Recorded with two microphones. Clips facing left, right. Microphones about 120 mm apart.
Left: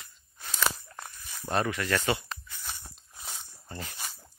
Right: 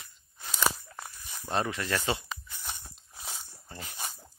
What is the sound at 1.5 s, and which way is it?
Speech, 20° right (ahead or behind).